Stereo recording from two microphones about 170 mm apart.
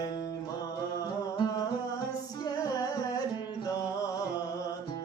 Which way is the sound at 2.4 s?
25° left (ahead or behind).